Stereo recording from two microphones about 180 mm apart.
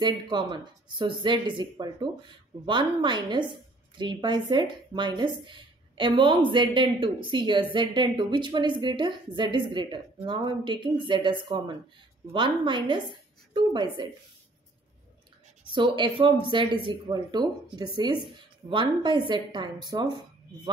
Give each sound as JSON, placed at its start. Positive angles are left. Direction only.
{"t": 0.0, "sound": "a woman's voice", "side_deg": -25}
{"t": 15.7, "sound": "a woman's voice", "side_deg": -25}